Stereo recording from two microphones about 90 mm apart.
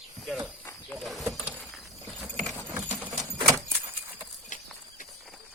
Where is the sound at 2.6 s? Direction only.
20° right (ahead or behind).